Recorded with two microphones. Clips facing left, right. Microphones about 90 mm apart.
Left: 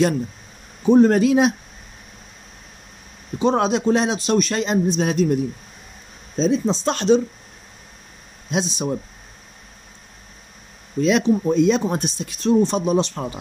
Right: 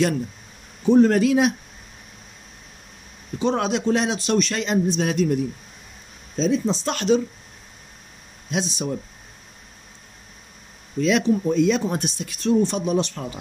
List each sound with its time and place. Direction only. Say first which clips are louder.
0.8 s speech: left 2 dB; 20° left (ahead or behind)
3.3 s speech: left 4 dB; 20° left (ahead or behind)
8.5 s speech: left 3 dB; 20° left (ahead or behind)
11.0 s speech: left 2 dB; 20° left (ahead or behind)